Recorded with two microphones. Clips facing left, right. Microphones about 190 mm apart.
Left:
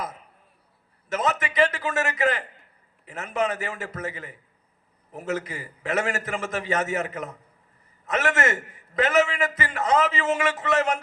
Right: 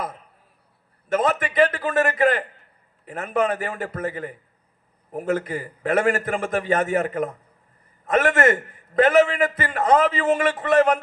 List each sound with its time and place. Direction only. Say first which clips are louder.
1.1 s a man's voice: right 5 dB; 55° right (ahead or behind)